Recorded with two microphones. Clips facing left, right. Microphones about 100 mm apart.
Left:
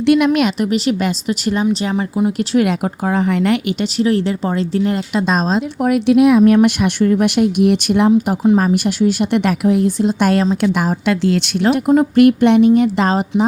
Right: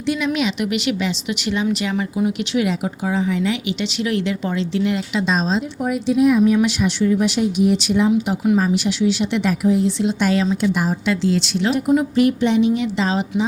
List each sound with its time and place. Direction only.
0.0 s speech: 60° left (ahead or behind)
0.6 s speech: 40° left (ahead or behind)
2.6 s speech: 55° left (ahead or behind)
5.8 s a woman's voice: 75° left (ahead or behind)
10.0 s speech: 45° left (ahead or behind)
10.6 s a woman's voice: 60° left (ahead or behind)